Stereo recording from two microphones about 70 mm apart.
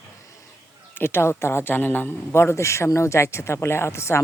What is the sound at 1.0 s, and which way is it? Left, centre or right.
A man's voice, left.